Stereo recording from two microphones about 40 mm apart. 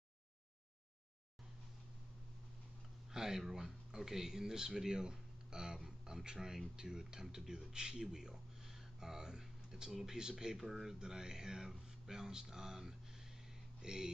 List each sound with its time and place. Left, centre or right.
3.1 s speech: centre